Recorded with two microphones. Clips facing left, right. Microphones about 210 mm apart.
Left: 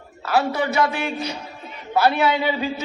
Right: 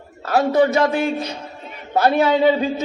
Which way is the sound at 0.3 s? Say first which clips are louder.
Right 5 dB; 35° right (ahead or behind).